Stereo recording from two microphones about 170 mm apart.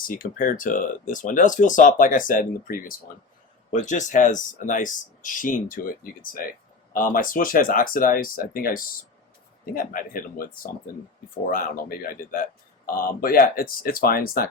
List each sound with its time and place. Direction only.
0.1 s speech: 55° left (ahead or behind)